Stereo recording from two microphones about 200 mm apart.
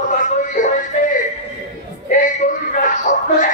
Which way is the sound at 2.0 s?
40° left (ahead or behind).